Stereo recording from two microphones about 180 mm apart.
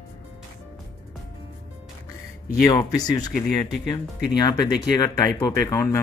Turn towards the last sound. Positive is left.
turn(degrees=15)  # may be behind; listen again after turning